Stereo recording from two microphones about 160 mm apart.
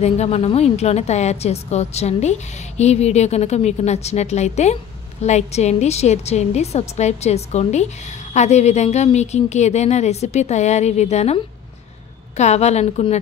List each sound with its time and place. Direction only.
0.0 s a woman's voice: 40° left (ahead or behind)